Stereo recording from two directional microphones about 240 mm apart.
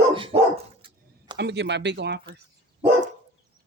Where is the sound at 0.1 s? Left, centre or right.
Right.